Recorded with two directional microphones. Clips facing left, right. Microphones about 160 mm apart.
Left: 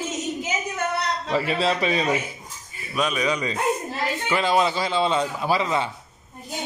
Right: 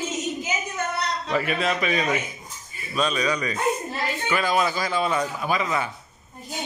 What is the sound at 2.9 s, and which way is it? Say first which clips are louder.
A man's voice: even; 15° left (ahead or behind).